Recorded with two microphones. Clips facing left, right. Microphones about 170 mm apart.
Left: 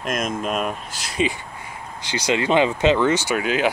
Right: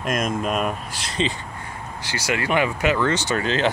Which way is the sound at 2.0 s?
20° left (ahead or behind).